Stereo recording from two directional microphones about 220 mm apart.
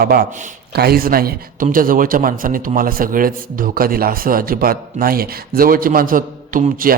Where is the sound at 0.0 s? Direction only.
45° right (ahead or behind).